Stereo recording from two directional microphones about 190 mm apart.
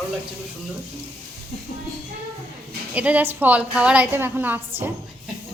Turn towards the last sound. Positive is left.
turn(degrees=-10)  # may be behind; listen again after turning